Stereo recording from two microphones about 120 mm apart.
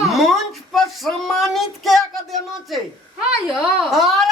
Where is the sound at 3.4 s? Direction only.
5° right (ahead or behind).